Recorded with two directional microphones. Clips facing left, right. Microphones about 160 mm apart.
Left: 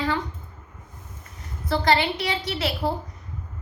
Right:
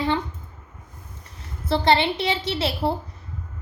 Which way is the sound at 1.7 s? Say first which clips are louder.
Right 2 dB; 25° right (ahead or behind).